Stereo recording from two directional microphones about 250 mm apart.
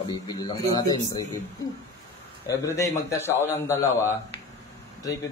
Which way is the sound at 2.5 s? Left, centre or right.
Centre.